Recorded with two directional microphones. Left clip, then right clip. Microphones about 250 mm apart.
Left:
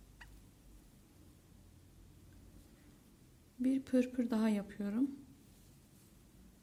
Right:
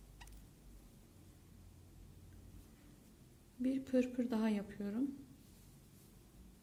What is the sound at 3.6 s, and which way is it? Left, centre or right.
Speech, centre.